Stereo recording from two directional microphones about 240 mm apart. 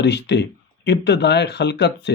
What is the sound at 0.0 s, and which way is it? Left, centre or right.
Speech, left.